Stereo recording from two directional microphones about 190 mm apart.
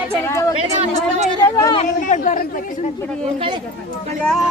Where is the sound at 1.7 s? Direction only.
35° left (ahead or behind).